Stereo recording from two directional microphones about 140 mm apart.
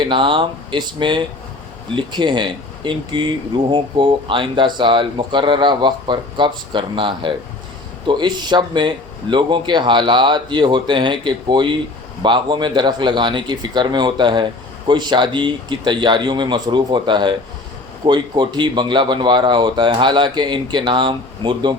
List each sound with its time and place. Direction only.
0.0 s speech: 35° right (ahead or behind)